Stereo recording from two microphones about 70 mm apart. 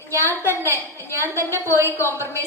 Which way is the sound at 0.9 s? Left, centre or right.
Left.